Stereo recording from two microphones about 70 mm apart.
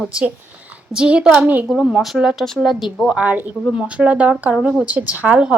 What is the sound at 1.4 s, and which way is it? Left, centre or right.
Speech, right.